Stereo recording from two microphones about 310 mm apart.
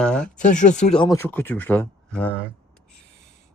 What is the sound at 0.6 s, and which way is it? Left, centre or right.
Speech, left.